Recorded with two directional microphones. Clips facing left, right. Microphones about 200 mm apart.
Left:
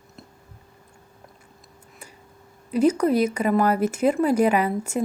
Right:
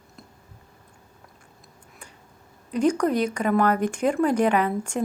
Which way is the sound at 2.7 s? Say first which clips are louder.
Left 2 dB; 5° left (ahead or behind).